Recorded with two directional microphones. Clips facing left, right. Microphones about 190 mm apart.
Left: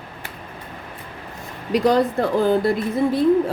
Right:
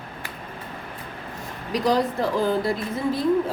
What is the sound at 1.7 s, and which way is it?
Speech, 60° left (ahead or behind).